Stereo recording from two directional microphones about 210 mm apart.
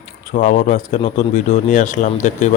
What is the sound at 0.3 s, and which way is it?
Speech, 35° left (ahead or behind).